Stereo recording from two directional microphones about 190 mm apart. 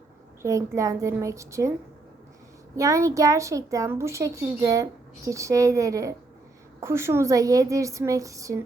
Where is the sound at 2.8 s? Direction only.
15° right (ahead or behind).